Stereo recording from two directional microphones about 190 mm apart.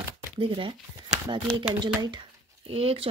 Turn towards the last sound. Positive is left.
turn(degrees=-30)  # may be behind; listen again after turning